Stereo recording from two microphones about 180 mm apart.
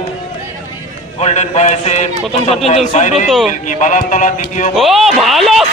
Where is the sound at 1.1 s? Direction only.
40° left (ahead or behind).